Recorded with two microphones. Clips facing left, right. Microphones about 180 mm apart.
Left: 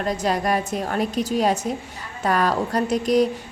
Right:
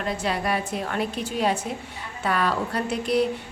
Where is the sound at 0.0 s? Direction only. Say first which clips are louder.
Left 4 dB; 40° left (ahead or behind).